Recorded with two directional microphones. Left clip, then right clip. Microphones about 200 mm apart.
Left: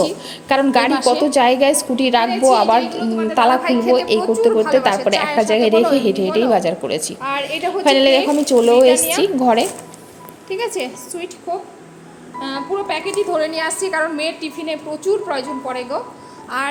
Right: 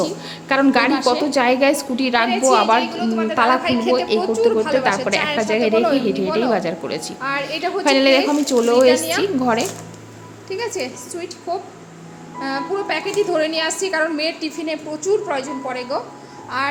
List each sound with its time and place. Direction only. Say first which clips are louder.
0.0 s a woman's voice: left 4 dB; 5° left (ahead or behind)
2.3 s a woman's voice: left 2 dB; 5° right (ahead or behind)
2.6 s a woman's voice: left 2 dB; 5° left (ahead or behind)
3.3 s a woman's voice: left 3 dB; 5° left (ahead or behind)
15.0 s speech: even; 20° left (ahead or behind)
15.4 s a woman's voice: left 1 dB; 5° left (ahead or behind)